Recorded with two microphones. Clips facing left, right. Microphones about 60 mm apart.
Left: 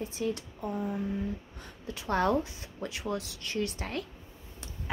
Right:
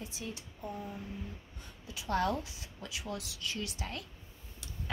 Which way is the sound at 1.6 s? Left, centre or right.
Left.